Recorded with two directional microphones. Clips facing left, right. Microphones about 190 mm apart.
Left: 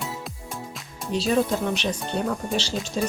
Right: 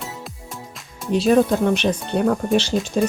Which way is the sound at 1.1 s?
55° right (ahead or behind).